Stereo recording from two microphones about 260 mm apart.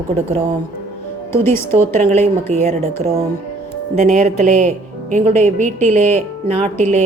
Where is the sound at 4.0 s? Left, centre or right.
Right.